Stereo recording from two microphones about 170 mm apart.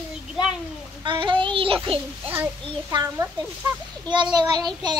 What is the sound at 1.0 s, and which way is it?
Speech, 30° right (ahead or behind).